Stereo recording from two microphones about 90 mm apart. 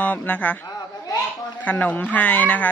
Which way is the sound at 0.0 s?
15° left (ahead or behind).